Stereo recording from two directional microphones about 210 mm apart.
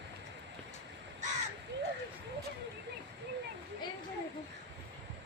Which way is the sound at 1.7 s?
55° right (ahead or behind).